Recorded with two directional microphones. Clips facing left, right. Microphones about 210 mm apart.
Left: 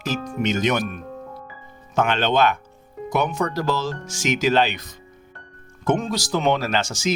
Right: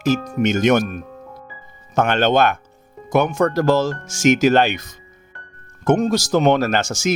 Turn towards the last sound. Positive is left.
turn(degrees=-45)  # may be behind; listen again after turning